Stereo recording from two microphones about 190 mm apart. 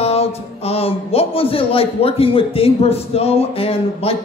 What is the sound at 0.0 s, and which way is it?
A man's voice, 35° left (ahead or behind).